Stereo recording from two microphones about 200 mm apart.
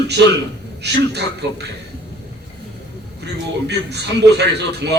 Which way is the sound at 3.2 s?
55° right (ahead or behind).